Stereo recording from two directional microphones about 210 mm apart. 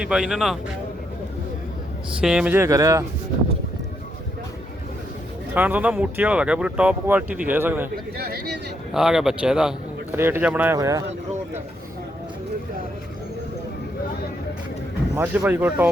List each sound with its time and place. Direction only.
0.0 s speech: 5° right (ahead or behind)
2.2 s speech: 5° right (ahead or behind)
5.5 s speech: 10° right (ahead or behind)
8.2 s speech: 50° right (ahead or behind)
8.9 s speech: centre (ahead or behind)
15.1 s speech: 10° right (ahead or behind)